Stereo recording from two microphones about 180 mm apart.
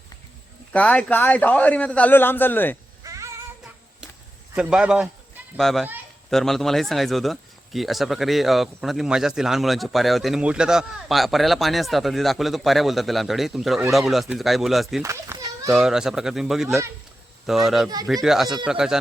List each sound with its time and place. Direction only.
0.7 s a man's voice: 10° left (ahead or behind)
3.0 s a sound: 20° right (ahead or behind)
4.5 s speech: 5° right (ahead or behind)
15.0 s children playing: 15° right (ahead or behind)
15.7 s speech: 5° right (ahead or behind)
16.6 s speech: 15° right (ahead or behind)
17.4 s speech: centre (ahead or behind)